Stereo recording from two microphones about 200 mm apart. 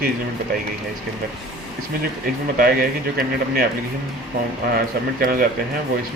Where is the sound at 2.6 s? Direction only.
50° right (ahead or behind).